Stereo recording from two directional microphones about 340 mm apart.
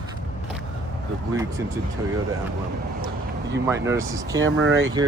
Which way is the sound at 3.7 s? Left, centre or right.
Centre.